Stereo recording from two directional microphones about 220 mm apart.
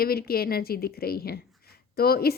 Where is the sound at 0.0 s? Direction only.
45° left (ahead or behind).